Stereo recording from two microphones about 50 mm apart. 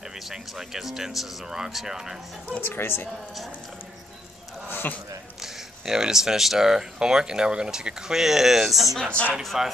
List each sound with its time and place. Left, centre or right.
0.2 s speech: centre
2.6 s speech: left
4.6 s a sound: left
5.4 s speech: centre